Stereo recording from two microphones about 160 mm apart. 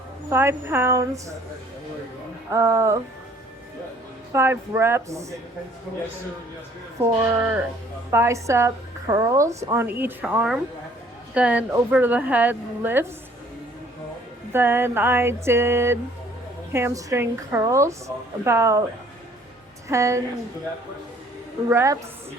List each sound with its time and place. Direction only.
0.3 s a woman's voice: 15° right (ahead or behind)
2.5 s a woman's voice: 15° right (ahead or behind)
4.3 s a woman's voice: 15° right (ahead or behind)
7.0 s a woman's voice: 15° right (ahead or behind)
14.5 s a woman's voice: 15° right (ahead or behind)
19.9 s a woman's voice: 20° right (ahead or behind)
21.7 s a woman's voice: 15° right (ahead or behind)